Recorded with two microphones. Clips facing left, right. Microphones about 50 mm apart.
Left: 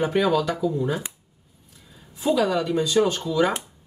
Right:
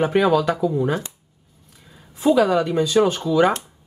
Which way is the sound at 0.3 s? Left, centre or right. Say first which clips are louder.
Right 4 dB; centre.